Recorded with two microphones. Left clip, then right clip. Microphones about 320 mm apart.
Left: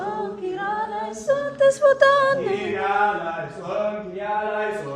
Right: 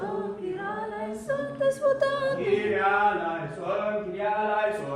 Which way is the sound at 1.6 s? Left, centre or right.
Left.